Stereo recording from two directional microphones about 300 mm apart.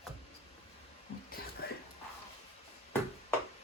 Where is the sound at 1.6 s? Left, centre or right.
Left.